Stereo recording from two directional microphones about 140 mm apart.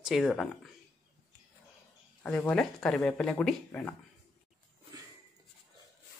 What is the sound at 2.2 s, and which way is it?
Speech, 5° left (ahead or behind).